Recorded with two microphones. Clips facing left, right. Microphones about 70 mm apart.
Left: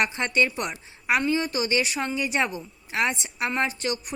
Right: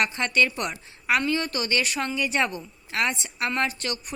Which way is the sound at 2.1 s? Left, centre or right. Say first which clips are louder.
Even; centre.